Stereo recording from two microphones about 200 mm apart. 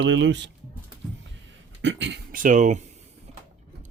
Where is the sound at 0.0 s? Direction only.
65° right (ahead or behind).